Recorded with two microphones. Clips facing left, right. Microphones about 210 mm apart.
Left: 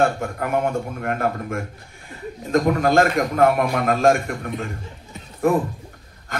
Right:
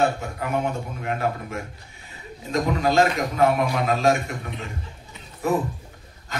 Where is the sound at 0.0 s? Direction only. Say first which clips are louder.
Left 3 dB; 50° left (ahead or behind).